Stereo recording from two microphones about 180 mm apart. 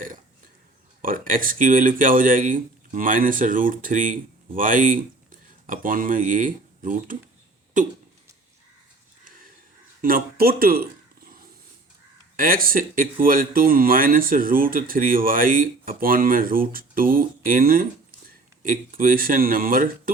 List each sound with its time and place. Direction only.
1.0 s speech: 50° right (ahead or behind)
9.2 s a sound: 50° right (ahead or behind)
10.0 s speech: 55° right (ahead or behind)
12.4 s speech: 50° right (ahead or behind)